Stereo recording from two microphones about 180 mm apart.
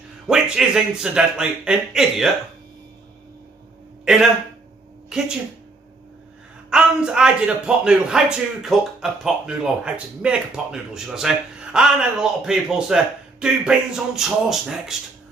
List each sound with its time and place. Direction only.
0.3 s speech: 5° right (ahead or behind)
4.0 s a man's voice: 5° right (ahead or behind)
6.7 s speech: 5° right (ahead or behind)